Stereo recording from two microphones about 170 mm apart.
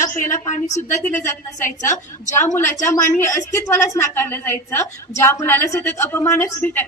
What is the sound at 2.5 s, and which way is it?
A woman's voice, 15° left (ahead or behind).